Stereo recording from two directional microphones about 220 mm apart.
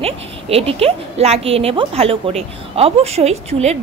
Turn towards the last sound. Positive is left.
turn(degrees=-30)  # may be behind; listen again after turning